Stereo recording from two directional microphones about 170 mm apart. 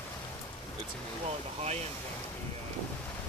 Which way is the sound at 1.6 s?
40° right (ahead or behind).